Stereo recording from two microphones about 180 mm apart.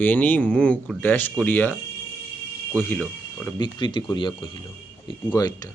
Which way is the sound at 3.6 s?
25° left (ahead or behind).